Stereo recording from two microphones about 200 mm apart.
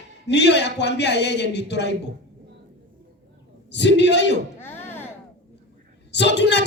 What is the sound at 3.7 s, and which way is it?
Speech, 60° left (ahead or behind).